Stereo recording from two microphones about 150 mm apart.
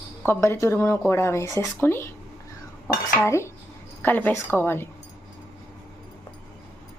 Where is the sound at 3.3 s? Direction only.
20° left (ahead or behind).